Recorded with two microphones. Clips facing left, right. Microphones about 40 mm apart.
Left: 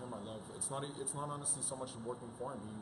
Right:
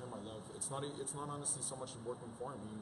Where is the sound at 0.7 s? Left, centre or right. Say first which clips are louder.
Left 1 dB; centre.